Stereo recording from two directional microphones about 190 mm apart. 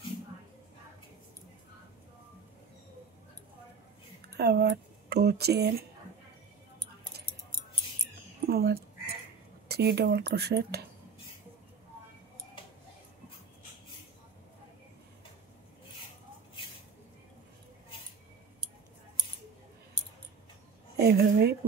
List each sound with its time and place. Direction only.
4.4 s speech: 60° right (ahead or behind)
8.5 s a sound: 55° right (ahead or behind)
9.7 s speech: 60° right (ahead or behind)
21.0 s speech: 55° right (ahead or behind)